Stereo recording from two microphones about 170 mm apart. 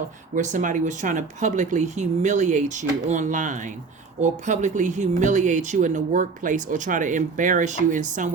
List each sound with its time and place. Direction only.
0.3 s speech: 45° right (ahead or behind)